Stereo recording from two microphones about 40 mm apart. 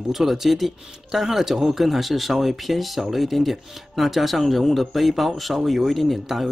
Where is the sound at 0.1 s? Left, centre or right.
Centre.